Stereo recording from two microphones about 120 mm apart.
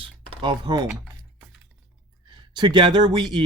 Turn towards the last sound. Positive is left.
turn(degrees=-40)  # may be behind; listen again after turning